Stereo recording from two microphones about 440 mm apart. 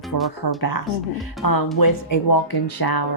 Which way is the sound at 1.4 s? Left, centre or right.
Left.